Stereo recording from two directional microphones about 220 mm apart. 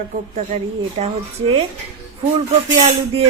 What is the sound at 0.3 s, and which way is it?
A woman's voice, 30° right (ahead or behind).